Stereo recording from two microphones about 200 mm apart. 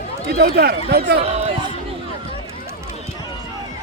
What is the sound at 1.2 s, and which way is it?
Basketball bounce, 30° right (ahead or behind).